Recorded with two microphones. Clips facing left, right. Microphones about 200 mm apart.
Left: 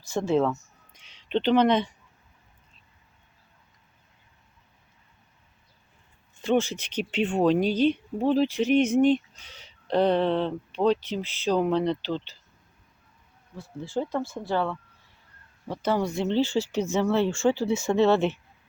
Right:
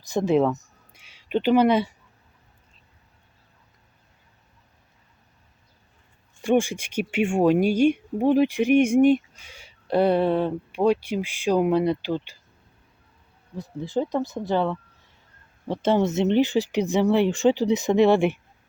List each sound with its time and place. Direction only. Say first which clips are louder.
0.1 s speech: right 3 dB; 15° right (ahead or behind)
6.4 s speech: right 3 dB; 15° right (ahead or behind)
13.6 s speech: right 4 dB; 15° right (ahead or behind)